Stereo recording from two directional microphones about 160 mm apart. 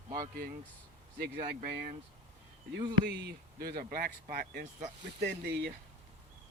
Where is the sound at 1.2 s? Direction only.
90° right; by 1.9 s 75° right (ahead or behind).